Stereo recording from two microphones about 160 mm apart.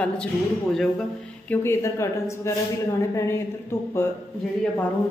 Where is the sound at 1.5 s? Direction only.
15° left (ahead or behind).